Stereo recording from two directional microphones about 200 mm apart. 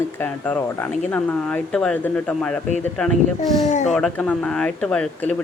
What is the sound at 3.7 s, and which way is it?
Speech, 35° left (ahead or behind).